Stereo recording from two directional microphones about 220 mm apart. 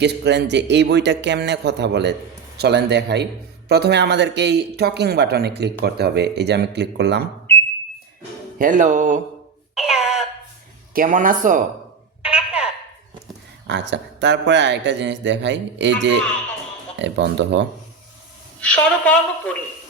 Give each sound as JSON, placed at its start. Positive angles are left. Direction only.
{"t": 0.0, "sound": "speech", "side_deg": -50}
{"t": 8.5, "sound": "speech", "side_deg": -35}
{"t": 9.7, "sound": "a sound", "side_deg": 0}
{"t": 10.9, "sound": "speech", "side_deg": -40}
{"t": 12.2, "sound": "a sound", "side_deg": -5}
{"t": 13.7, "sound": "speech", "side_deg": -55}
{"t": 18.6, "sound": "a woman's voice", "side_deg": 5}